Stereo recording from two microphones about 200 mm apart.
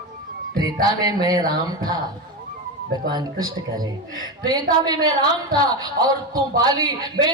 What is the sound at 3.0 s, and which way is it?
A man's voice, 20° right (ahead or behind).